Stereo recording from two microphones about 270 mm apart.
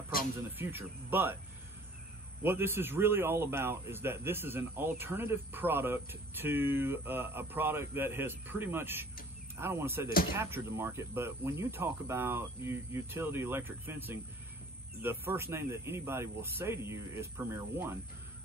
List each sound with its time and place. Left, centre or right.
0.4 s a man's voice: centre
2.4 s a man's voice: centre